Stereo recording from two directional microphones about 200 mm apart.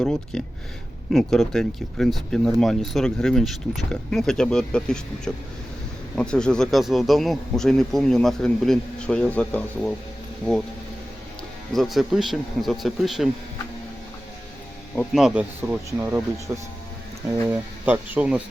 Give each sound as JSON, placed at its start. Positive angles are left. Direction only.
{"t": 0.0, "sound": "speech", "side_deg": 5}
{"t": 11.7, "sound": "speech", "side_deg": 0}
{"t": 14.9, "sound": "speech", "side_deg": 0}